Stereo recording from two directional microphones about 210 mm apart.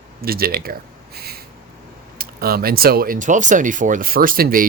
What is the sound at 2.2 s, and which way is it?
Speech, 45° right (ahead or behind).